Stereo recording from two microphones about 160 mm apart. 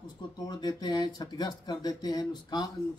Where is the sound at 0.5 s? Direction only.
25° left (ahead or behind).